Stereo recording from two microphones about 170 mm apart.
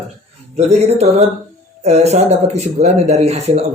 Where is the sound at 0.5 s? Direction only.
40° right (ahead or behind).